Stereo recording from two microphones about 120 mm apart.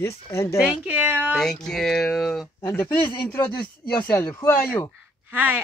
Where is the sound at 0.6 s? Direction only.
10° right (ahead or behind).